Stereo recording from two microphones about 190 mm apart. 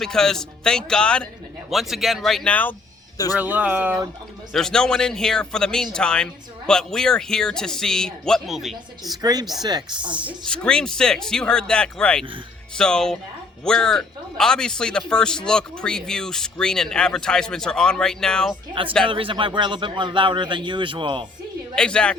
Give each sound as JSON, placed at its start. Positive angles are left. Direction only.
{"t": 0.0, "sound": "a man's voice", "side_deg": 5}
{"t": 3.3, "sound": "speech", "side_deg": -10}
{"t": 4.5, "sound": "a man's voice", "side_deg": 5}
{"t": 9.0, "sound": "a man's voice", "side_deg": -20}
{"t": 10.4, "sound": "a man's voice", "side_deg": 5}
{"t": 18.7, "sound": "a man's voice", "side_deg": -25}
{"t": 21.8, "sound": "a man's voice", "side_deg": 5}